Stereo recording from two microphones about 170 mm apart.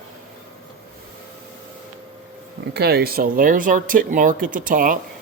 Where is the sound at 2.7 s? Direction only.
70° right (ahead or behind); by 4.9 s 55° right (ahead or behind).